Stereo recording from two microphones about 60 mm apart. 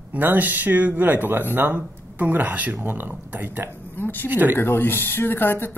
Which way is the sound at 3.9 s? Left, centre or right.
Left.